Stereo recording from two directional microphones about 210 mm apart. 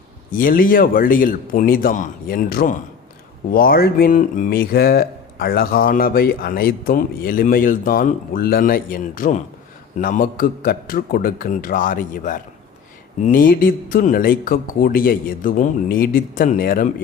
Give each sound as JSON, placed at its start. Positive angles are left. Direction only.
{"t": 0.3, "sound": "speech", "side_deg": 40}